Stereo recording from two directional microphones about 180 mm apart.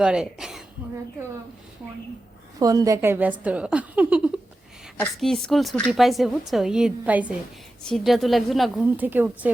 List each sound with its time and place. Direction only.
0.0 s speech: 5° right (ahead or behind)
2.6 s a woman's voice: 20° right (ahead or behind)